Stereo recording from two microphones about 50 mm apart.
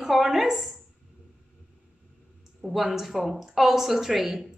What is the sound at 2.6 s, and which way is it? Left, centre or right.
A woman's voice, centre.